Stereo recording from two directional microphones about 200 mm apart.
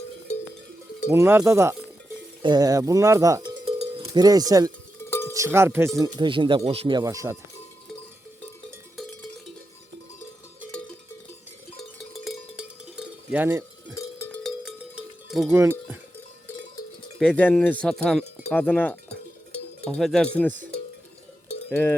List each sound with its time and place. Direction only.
1.1 s speech: 15° right (ahead or behind)
3.7 s music: 30° right (ahead or behind)
4.0 s cowbell: 20° right (ahead or behind)
5.0 s music: 10° left (ahead or behind)
5.3 s speech: 15° right (ahead or behind)
6.1 s speech: 25° right (ahead or behind)
11.8 s cowbell: centre (ahead or behind)
13.9 s cowbell: 15° left (ahead or behind)
15.3 s speech: centre (ahead or behind)
15.5 s speech: 10° right (ahead or behind)
17.2 s cowbell: 5° left (ahead or behind)
21.7 s cowbell: 10° left (ahead or behind)